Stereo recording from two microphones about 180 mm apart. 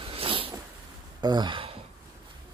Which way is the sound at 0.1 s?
30° right (ahead or behind).